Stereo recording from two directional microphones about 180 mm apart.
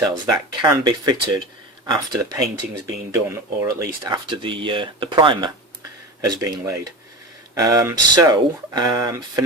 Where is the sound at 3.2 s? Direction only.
15° right (ahead or behind).